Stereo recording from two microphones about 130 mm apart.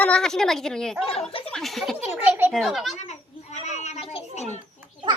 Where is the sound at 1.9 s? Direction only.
15° right (ahead or behind).